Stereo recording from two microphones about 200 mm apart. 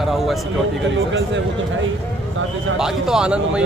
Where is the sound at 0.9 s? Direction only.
70° right (ahead or behind).